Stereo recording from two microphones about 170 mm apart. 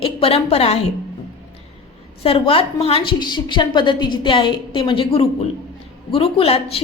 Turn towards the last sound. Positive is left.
turn(degrees=35)  # may be behind; listen again after turning